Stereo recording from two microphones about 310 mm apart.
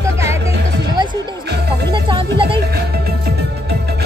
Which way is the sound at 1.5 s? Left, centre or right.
Right.